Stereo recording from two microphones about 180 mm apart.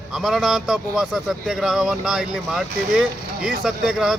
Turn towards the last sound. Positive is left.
turn(degrees=0)  # may be behind; listen again after turning